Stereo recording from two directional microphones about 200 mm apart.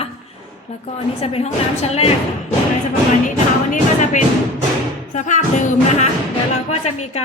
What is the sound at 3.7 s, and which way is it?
A woman's voice, 40° left (ahead or behind).